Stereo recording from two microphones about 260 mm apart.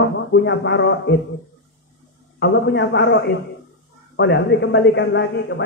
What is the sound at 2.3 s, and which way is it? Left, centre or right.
A man's voice, left.